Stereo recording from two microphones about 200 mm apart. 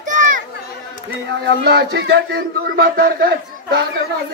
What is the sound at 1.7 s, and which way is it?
Speech, 55° right (ahead or behind).